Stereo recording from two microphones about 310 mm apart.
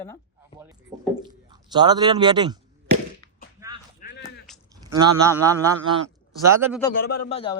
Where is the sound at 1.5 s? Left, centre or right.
Centre.